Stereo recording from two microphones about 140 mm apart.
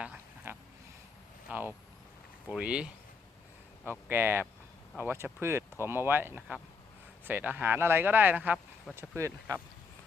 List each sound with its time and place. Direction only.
0.0 s frog: 10° right (ahead or behind)
1.5 s speech: 15° right (ahead or behind)
4.1 s speech: 15° right (ahead or behind)